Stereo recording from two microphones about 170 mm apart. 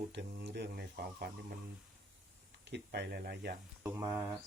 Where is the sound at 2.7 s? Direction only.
85° right; by 3.5 s 70° right (ahead or behind).